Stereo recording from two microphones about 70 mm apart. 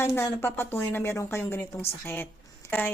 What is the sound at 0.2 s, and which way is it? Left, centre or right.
A woman's voice, left.